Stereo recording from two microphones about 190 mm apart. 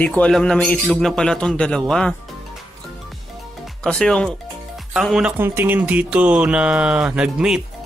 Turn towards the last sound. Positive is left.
turn(degrees=-5)  # may be behind; listen again after turning